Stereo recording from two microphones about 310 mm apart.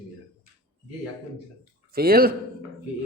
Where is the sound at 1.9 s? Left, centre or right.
Right.